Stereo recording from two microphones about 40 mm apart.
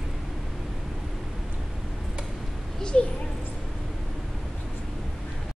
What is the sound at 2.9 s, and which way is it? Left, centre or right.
Speech, left.